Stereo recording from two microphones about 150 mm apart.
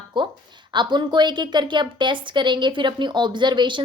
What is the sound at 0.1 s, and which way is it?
A woman's voice, 30° right (ahead or behind).